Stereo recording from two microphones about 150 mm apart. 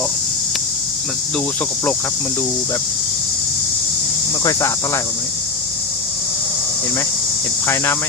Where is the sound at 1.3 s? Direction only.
10° left (ahead or behind).